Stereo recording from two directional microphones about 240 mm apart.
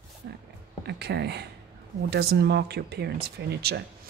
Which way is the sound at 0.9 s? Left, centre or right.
Right.